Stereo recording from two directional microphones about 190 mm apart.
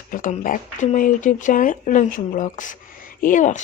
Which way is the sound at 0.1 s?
45° left (ahead or behind).